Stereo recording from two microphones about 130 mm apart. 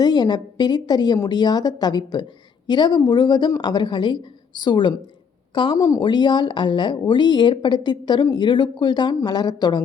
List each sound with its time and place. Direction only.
0.0 s speech: 35° left (ahead or behind)
5.7 s speech: 25° left (ahead or behind)
6.0 s speech: 35° left (ahead or behind)